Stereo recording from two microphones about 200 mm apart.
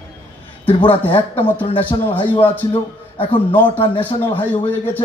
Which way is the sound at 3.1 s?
25° left (ahead or behind).